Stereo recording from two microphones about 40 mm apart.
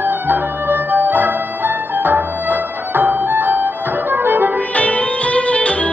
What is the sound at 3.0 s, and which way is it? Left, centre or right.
Music, right.